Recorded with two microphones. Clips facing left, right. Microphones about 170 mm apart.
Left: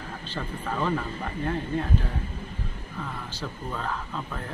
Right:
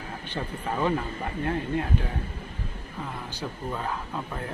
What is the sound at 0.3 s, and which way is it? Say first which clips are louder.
Speech: right 1 dB; 15° right (ahead or behind).